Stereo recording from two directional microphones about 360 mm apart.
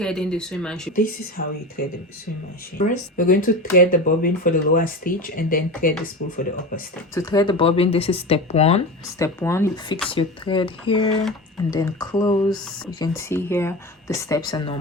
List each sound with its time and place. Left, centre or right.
0.0 s speech: centre
0.9 s speech: left
2.7 s speech: left
7.1 s speech: centre